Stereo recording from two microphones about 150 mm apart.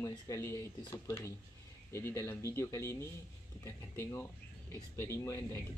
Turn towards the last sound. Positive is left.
turn(degrees=20)  # may be behind; listen again after turning